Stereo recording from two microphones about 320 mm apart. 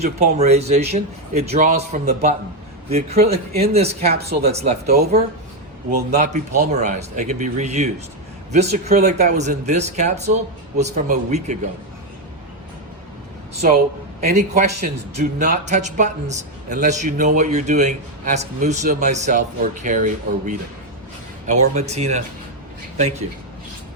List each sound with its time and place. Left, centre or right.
0.0 s speech: right
13.6 s speech: right